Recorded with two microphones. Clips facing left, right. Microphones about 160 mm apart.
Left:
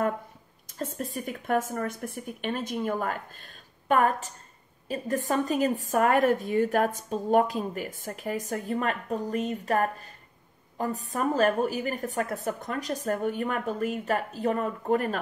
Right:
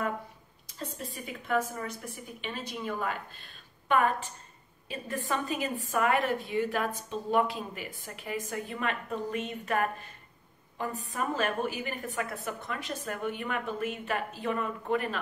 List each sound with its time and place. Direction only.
0.7 s a woman's voice: 45° left (ahead or behind)